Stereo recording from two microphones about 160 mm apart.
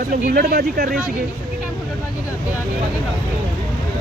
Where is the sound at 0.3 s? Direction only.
75° right (ahead or behind).